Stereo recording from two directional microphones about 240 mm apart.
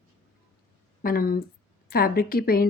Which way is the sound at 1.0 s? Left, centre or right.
Left.